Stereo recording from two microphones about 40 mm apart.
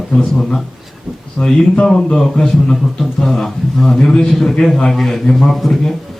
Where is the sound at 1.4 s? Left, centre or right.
Left.